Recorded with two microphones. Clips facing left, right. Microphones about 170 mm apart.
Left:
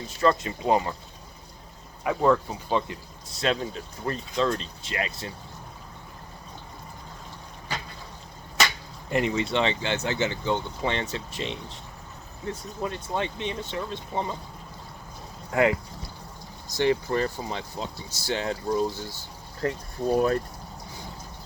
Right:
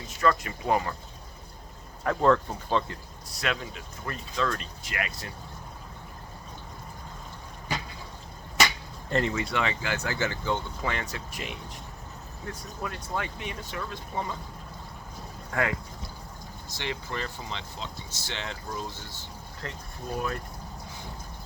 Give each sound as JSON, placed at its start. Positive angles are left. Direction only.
{"t": 0.2, "sound": "speech", "side_deg": 25}
{"t": 2.0, "sound": "speech", "side_deg": 10}
{"t": 9.0, "sound": "speech", "side_deg": 15}
{"t": 9.3, "sound": "speech", "side_deg": 25}
{"t": 15.5, "sound": "speech", "side_deg": 20}
{"t": 16.7, "sound": "speech", "side_deg": 40}
{"t": 20.1, "sound": "speech", "side_deg": 40}